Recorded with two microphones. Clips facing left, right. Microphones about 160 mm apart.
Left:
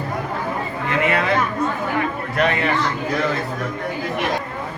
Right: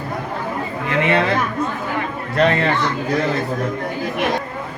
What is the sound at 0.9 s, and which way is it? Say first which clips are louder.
Speech: right 3 dB; 25° right (ahead or behind).